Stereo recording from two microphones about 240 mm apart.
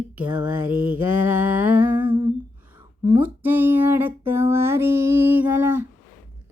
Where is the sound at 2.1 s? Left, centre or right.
Right.